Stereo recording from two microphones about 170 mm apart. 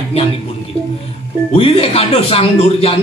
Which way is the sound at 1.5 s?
35° left (ahead or behind).